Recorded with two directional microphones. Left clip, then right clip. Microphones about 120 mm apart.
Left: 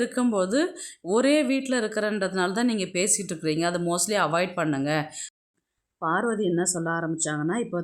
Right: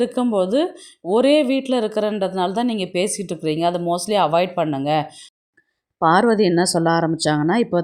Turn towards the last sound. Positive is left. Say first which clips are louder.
# right 9 dB
turn(degrees=-50)  # may be behind; listen again after turning